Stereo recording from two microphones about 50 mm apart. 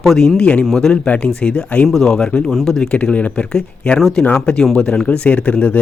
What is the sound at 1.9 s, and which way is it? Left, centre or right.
Speech, centre.